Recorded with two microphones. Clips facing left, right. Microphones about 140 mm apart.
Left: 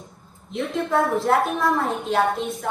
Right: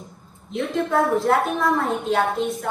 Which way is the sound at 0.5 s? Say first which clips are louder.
Right 1 dB; centre (ahead or behind).